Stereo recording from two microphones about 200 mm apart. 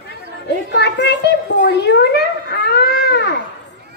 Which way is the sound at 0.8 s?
55° left (ahead or behind).